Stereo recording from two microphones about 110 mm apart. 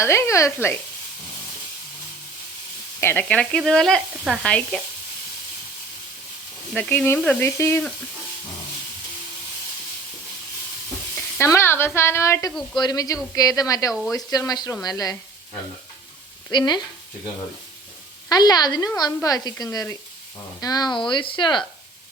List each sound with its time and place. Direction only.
0.0 s speech: 25° left (ahead or behind)
3.0 s speech: 20° left (ahead or behind)
3.2 s speech: 10° left (ahead or behind)
4.4 s speech: 10° left (ahead or behind)
6.7 s speech: 10° left (ahead or behind)
11.3 s speech: 25° left (ahead or behind)
16.5 s speech: 40° left (ahead or behind)
18.3 s speech: 35° left (ahead or behind)
21.1 s speech: 50° left (ahead or behind)